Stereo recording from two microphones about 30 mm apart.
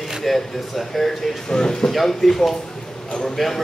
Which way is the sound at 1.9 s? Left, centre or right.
Centre.